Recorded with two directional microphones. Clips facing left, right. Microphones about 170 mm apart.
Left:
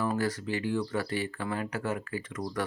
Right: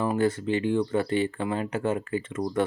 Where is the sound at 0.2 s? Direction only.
25° right (ahead or behind).